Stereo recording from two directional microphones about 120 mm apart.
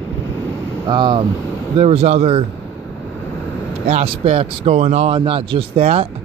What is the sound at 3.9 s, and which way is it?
Speech, 55° right (ahead or behind).